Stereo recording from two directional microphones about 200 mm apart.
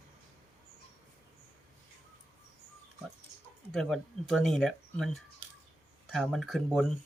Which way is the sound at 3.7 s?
Centre (ahead or behind).